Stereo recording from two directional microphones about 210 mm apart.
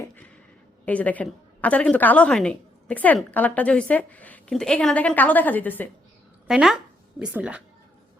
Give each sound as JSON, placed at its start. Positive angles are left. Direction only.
{"t": 0.9, "sound": "a woman's voice", "side_deg": 5}
{"t": 6.5, "sound": "speech", "side_deg": 0}